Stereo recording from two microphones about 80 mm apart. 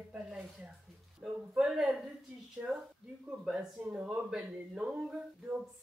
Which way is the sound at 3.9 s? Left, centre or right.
Centre.